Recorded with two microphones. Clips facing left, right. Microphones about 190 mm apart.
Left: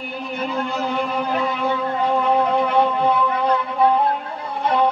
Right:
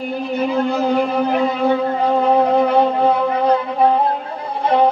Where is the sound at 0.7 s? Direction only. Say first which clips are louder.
Right 6 dB; 45° right (ahead or behind).